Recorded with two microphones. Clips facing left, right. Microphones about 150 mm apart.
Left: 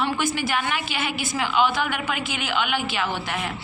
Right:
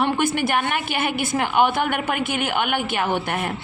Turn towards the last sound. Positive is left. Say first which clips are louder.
# right 5 dB
turn(degrees=-50)  # may be behind; listen again after turning